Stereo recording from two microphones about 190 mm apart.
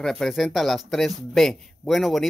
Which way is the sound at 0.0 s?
Centre (ahead or behind).